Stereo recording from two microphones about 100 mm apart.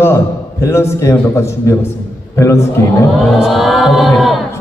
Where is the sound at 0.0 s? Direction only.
25° left (ahead or behind).